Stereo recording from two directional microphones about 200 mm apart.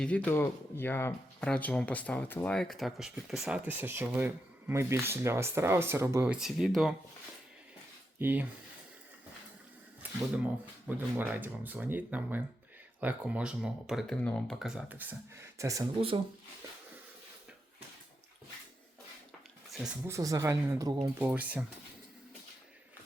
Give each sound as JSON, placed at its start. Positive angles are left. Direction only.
{"t": 0.0, "sound": "speech", "side_deg": 5}
{"t": 8.2, "sound": "speech", "side_deg": -10}
{"t": 10.0, "sound": "a sound", "side_deg": -10}
{"t": 10.8, "sound": "speech", "side_deg": -10}
{"t": 16.0, "sound": "speech", "side_deg": -30}
{"t": 20.1, "sound": "speech", "side_deg": -15}
{"t": 21.2, "sound": "speech", "side_deg": -10}